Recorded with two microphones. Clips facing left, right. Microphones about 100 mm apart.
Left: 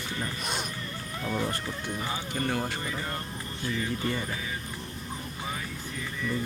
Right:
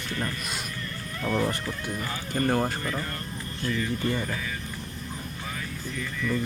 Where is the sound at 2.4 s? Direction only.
45° right (ahead or behind).